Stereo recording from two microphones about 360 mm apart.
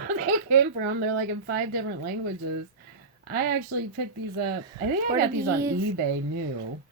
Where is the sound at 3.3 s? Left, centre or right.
Right.